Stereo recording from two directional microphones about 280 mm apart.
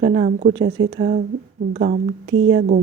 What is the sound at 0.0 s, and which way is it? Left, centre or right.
Speech, right.